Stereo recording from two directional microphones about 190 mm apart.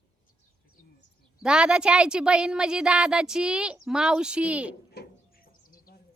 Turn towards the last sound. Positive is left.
turn(degrees=50)  # may be behind; listen again after turning